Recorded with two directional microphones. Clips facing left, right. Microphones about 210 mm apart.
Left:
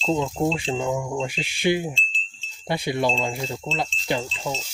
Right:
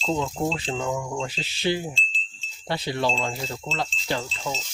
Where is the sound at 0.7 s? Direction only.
10° left (ahead or behind).